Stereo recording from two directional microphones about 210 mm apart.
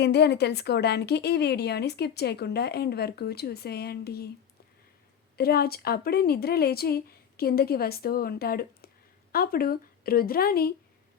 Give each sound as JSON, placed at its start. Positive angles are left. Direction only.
{"t": 0.0, "sound": "speech", "side_deg": 50}
{"t": 5.4, "sound": "speech", "side_deg": 45}